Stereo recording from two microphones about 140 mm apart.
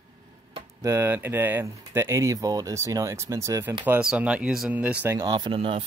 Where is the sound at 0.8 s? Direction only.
15° right (ahead or behind).